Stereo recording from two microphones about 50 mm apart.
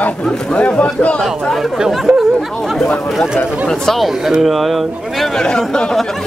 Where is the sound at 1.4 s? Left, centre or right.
Centre.